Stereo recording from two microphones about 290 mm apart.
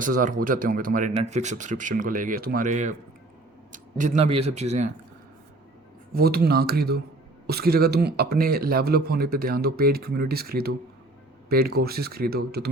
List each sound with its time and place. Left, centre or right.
0.0 s speech: right
6.1 s speech: right